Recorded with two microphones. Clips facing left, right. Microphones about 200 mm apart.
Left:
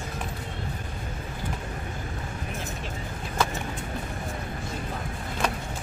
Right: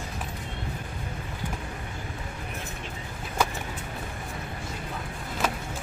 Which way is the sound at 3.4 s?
10° right (ahead or behind).